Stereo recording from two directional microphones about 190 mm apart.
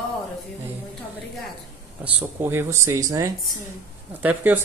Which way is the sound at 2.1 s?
10° right (ahead or behind).